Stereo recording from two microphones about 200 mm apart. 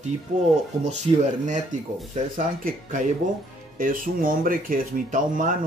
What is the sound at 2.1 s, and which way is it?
Speech, 40° right (ahead or behind).